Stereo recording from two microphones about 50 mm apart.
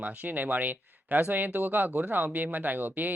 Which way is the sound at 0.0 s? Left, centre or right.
Right.